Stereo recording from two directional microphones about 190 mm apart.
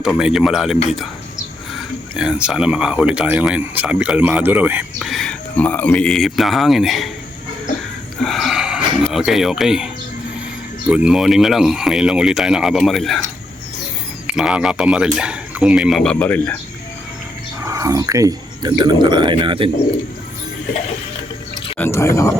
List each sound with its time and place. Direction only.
0.0 s speech: 5° right (ahead or behind)
8.2 s a sound: centre (ahead or behind)
10.8 s speech: 5° right (ahead or behind)
14.3 s speech: 5° right (ahead or behind)
17.7 s speech: 15° right (ahead or behind)
21.8 s speech: 15° left (ahead or behind)